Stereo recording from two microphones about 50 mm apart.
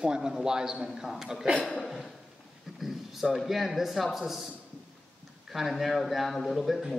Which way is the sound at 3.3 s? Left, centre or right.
Centre.